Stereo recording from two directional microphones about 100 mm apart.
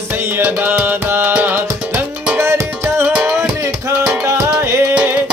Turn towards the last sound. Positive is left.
turn(degrees=-15)  # may be behind; listen again after turning